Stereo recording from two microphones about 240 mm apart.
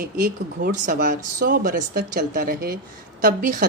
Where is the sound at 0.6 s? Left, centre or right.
Right.